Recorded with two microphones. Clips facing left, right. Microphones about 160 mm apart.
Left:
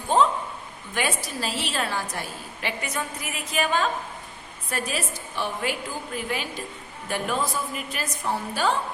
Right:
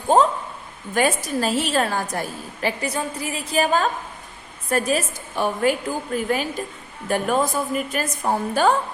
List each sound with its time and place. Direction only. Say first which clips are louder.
0.1 s a woman's voice: right 3 dB; 45° right (ahead or behind)